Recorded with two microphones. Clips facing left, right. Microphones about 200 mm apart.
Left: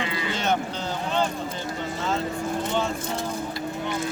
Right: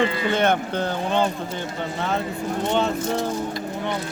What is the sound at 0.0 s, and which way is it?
Speech, 55° right (ahead or behind).